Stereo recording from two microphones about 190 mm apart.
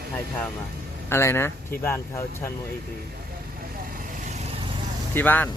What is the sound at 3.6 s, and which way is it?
Vehicle, 50° right (ahead or behind).